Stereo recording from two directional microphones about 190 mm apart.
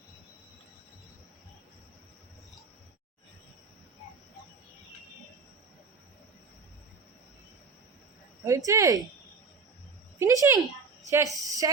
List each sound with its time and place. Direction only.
8.4 s a woman's voice: 15° right (ahead or behind)
10.2 s a woman's voice: 15° right (ahead or behind)